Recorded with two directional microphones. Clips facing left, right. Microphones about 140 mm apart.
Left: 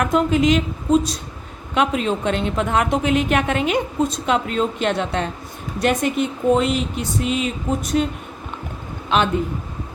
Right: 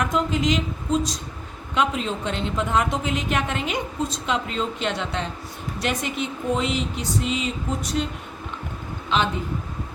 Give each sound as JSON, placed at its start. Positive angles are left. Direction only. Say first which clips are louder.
{"t": 0.0, "sound": "a woman's voice", "louder": "left 6 dB", "side_deg": 55}
{"t": 9.0, "sound": "a man's voice", "louder": "left 4 dB", "side_deg": 55}